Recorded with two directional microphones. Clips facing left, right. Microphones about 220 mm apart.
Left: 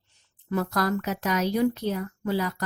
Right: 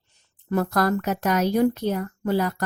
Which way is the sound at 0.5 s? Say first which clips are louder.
Right 4 dB; 50° right (ahead or behind).